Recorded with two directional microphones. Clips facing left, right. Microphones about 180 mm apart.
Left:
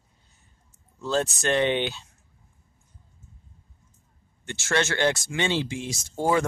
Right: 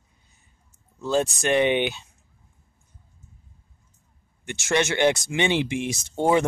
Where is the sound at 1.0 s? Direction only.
15° right (ahead or behind).